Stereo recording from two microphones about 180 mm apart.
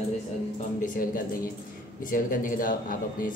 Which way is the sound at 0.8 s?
50° left (ahead or behind).